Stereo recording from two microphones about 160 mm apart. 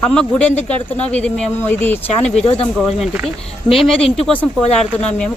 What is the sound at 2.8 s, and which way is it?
Speech, centre (ahead or behind).